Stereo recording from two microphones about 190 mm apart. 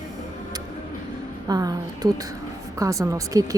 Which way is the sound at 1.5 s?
20° right (ahead or behind).